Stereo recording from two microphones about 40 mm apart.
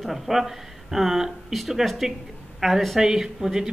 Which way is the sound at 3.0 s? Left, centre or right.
Centre.